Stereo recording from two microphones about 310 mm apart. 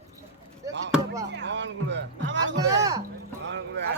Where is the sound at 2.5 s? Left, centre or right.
Centre.